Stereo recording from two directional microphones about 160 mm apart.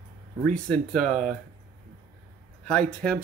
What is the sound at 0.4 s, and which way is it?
Speech, 5° left (ahead or behind).